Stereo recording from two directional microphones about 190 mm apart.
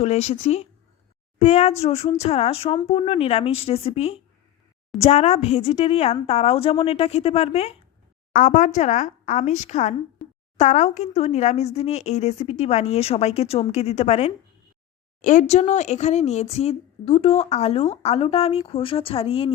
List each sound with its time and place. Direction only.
0.0 s speech: 35° left (ahead or behind)